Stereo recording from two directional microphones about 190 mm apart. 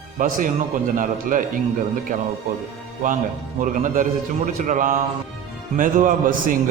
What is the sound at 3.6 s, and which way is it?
A man's voice, 40° right (ahead or behind).